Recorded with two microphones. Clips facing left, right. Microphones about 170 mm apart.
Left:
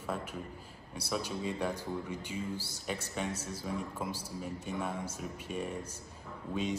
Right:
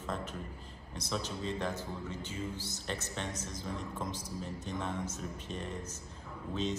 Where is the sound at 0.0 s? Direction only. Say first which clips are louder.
Left 1 dB; 10° left (ahead or behind).